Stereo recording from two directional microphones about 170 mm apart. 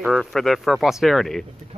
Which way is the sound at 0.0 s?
Centre (ahead or behind).